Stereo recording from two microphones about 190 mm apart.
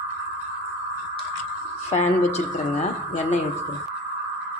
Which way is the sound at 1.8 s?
35° left (ahead or behind).